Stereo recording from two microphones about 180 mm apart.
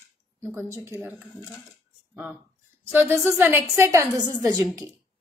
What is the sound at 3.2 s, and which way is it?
A woman's voice, 10° right (ahead or behind).